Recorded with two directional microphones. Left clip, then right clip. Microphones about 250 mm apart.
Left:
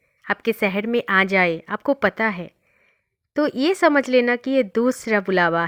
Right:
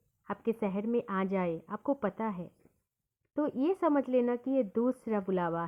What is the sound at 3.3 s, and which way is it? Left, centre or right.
Speech, left.